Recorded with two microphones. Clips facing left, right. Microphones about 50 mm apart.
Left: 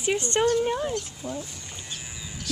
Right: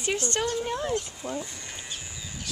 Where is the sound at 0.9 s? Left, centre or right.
Right.